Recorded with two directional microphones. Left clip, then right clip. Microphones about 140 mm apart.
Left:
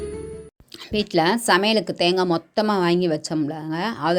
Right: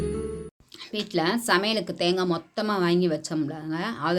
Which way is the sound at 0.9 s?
55° left (ahead or behind).